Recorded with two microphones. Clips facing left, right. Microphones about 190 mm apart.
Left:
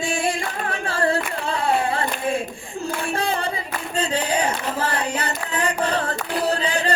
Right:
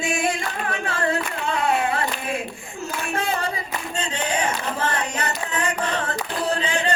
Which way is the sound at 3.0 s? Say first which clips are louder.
Even; 30° left (ahead or behind).